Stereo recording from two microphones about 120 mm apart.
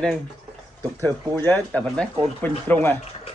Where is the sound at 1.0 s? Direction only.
20° left (ahead or behind).